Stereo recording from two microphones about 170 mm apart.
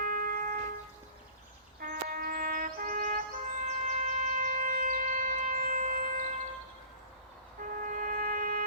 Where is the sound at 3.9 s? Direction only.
45° right (ahead or behind).